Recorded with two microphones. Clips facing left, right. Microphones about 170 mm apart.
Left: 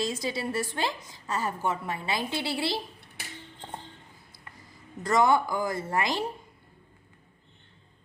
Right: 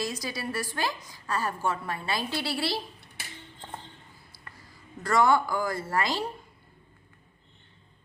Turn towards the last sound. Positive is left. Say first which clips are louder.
# even
turn(degrees=20)  # may be behind; listen again after turning